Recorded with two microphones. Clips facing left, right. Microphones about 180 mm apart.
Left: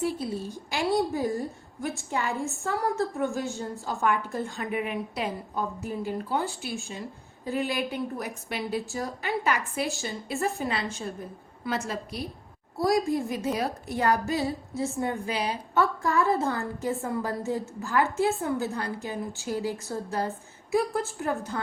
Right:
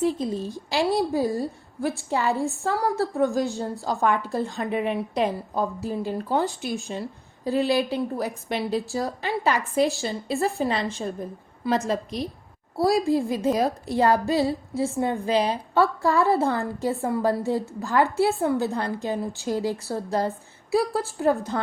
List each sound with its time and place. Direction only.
0.2 s a woman's voice: 10° left (ahead or behind)
0.7 s a woman's voice: 35° right (ahead or behind)